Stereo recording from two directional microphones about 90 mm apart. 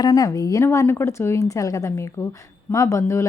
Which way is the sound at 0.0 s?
40° left (ahead or behind).